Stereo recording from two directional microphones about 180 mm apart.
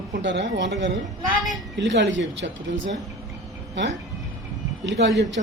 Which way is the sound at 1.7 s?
80° right.